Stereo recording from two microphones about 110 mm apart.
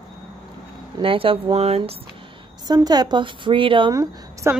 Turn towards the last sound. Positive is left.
turn(degrees=-30)  # may be behind; listen again after turning